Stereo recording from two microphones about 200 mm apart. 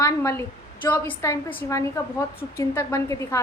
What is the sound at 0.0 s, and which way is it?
A woman's voice, 15° left (ahead or behind).